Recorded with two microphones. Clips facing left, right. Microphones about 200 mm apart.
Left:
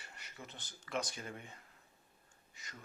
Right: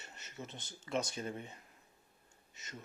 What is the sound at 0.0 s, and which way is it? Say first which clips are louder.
Speech: right 4 dB; 25° right (ahead or behind).